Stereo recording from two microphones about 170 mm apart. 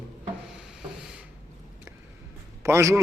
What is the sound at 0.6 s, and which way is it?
Rub, 5° right (ahead or behind).